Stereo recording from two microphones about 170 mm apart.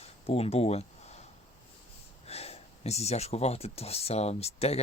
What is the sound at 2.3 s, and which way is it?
Speech, 35° left (ahead or behind).